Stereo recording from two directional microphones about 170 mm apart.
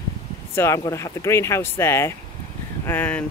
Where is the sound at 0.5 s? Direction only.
15° left (ahead or behind).